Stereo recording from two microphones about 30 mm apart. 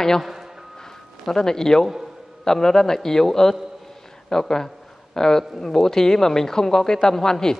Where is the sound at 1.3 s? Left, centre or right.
Centre.